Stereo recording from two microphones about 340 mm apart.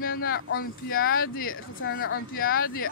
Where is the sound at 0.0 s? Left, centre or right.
Left.